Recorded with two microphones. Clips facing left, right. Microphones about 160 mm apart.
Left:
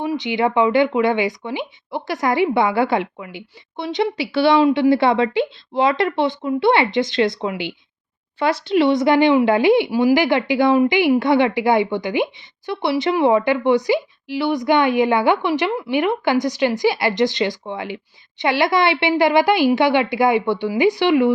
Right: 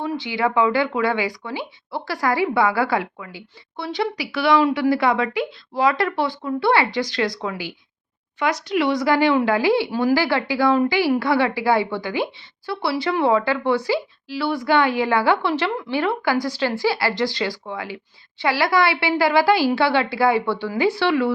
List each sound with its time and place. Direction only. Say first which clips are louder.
0.0 s speech: left 3 dB; 20° left (ahead or behind)